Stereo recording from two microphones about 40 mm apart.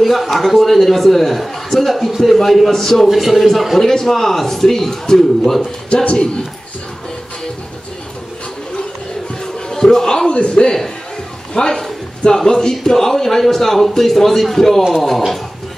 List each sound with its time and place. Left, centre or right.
0.0 s a man's voice: centre
5.9 s a man's voice: left
9.7 s speech: centre
10.3 s a man's voice: left
11.5 s a man's voice: centre